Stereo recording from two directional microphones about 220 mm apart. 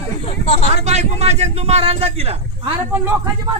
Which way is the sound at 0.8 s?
30° right (ahead or behind).